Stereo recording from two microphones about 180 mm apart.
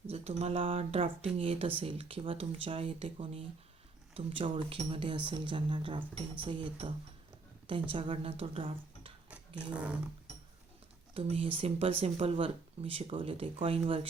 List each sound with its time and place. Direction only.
0.1 s speech: 35° right (ahead or behind)
9.7 s a sound: 5° right (ahead or behind)
11.1 s speech: 30° right (ahead or behind)